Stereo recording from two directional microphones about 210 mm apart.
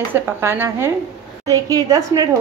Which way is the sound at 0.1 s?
10° right (ahead or behind).